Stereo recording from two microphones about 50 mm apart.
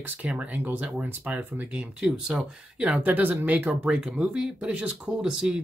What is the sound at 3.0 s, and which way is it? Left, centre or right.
Speech, right.